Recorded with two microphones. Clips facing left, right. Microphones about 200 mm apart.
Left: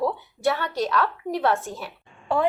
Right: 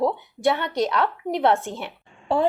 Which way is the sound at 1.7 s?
30° right (ahead or behind).